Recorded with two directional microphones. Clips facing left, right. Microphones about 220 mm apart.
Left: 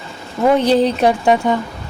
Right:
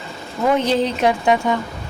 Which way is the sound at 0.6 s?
35° left (ahead or behind).